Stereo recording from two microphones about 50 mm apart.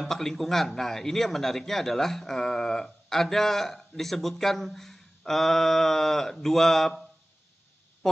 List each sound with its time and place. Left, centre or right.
0.0 s a man's voice: centre
8.0 s duck: centre